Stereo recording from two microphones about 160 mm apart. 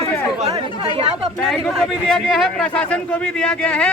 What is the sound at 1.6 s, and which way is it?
A man's voice, 5° left (ahead or behind).